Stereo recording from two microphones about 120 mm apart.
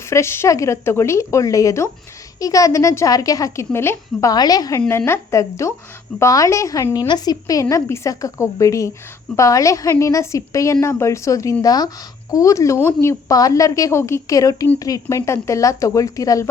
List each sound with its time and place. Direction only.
0.1 s a woman's voice: 20° left (ahead or behind)
4.9 s a woman's voice: 20° left (ahead or behind)